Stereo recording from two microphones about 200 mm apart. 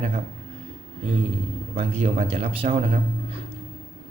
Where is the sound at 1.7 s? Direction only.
30° right (ahead or behind).